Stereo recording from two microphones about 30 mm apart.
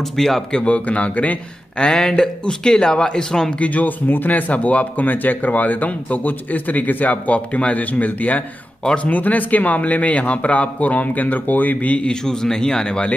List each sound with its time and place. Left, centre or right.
0.2 s speech: centre
0.7 s speech: left
2.0 s speech: left
3.5 s speech: left
4.2 s speech: left
9.1 s speech: left
12.0 s speech: left